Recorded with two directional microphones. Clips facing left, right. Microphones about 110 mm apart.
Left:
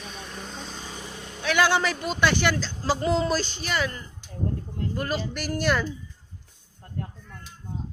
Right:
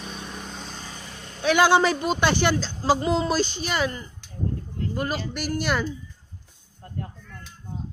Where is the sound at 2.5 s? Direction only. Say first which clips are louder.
Right 4 dB; 15° right (ahead or behind).